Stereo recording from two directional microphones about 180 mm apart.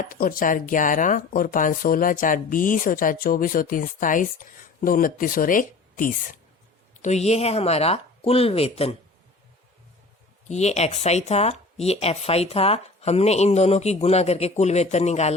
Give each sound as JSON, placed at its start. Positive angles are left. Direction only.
{"t": 0.0, "sound": "speech", "side_deg": 50}
{"t": 10.5, "sound": "speech", "side_deg": 40}